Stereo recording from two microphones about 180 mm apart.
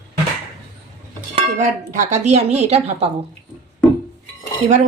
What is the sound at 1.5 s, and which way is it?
Speech, 45° right (ahead or behind).